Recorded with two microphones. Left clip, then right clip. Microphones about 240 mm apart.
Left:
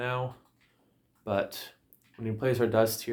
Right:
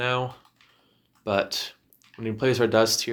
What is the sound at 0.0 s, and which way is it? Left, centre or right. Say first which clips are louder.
Typing: right 6 dB; right.